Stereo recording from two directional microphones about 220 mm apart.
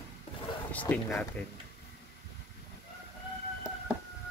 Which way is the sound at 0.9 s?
5° left (ahead or behind).